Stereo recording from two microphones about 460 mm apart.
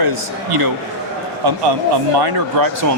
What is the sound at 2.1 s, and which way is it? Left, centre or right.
Speech, right.